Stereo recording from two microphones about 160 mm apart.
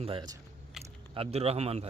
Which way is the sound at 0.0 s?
35° right (ahead or behind).